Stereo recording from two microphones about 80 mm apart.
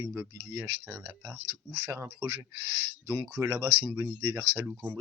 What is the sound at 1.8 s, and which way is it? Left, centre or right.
Speech, right.